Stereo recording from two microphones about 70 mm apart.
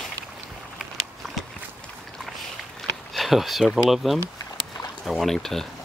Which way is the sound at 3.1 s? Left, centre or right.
Centre.